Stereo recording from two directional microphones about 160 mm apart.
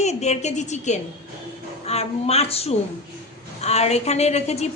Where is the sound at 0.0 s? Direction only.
45° left (ahead or behind).